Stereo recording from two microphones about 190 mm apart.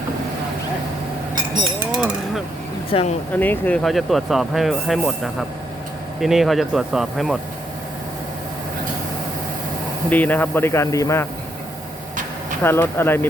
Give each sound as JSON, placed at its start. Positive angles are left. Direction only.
{"t": 1.9, "sound": "a sound", "side_deg": -5}
{"t": 2.9, "sound": "speech", "side_deg": 30}
{"t": 3.3, "sound": "speech", "side_deg": 10}
{"t": 10.1, "sound": "speech", "side_deg": 10}
{"t": 12.6, "sound": "speech", "side_deg": 10}